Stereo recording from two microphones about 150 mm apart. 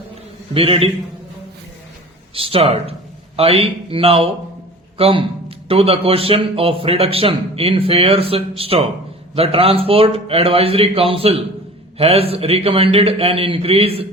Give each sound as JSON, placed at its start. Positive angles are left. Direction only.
{"t": 0.5, "sound": "a man's voice", "side_deg": -40}
{"t": 2.3, "sound": "a man's voice", "side_deg": -40}